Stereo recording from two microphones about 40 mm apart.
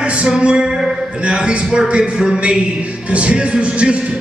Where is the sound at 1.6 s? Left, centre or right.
Centre.